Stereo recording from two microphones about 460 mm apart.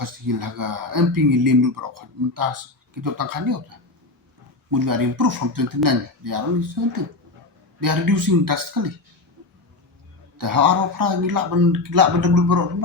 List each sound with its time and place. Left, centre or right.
0.0 s speech: right
4.7 s speech: right
10.3 s speech: right